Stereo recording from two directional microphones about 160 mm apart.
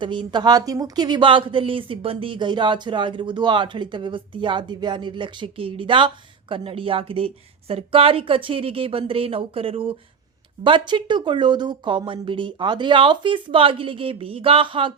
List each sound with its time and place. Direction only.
0.0 s a woman's voice: 30° right (ahead or behind)